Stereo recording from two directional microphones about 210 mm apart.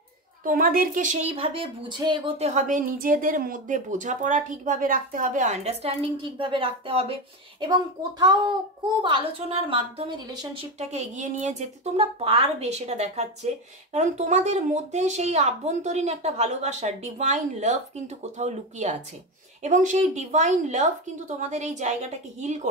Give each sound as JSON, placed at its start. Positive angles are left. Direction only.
{"t": 0.4, "sound": "a woman's voice", "side_deg": -40}
{"t": 10.8, "sound": "a woman's voice", "side_deg": -30}